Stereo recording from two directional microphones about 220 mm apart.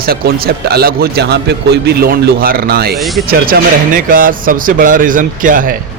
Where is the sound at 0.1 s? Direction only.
45° right (ahead or behind).